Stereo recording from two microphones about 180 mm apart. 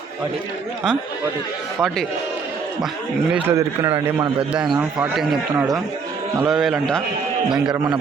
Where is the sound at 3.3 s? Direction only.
15° right (ahead or behind).